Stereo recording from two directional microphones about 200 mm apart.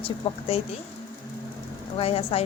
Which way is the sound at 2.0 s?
30° left (ahead or behind).